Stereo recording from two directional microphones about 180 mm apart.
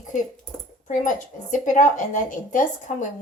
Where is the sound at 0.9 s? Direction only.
45° left (ahead or behind).